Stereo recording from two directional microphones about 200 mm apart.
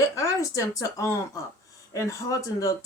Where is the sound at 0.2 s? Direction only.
15° left (ahead or behind).